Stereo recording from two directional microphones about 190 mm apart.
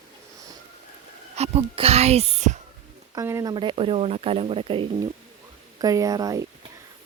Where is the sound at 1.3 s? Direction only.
35° right (ahead or behind).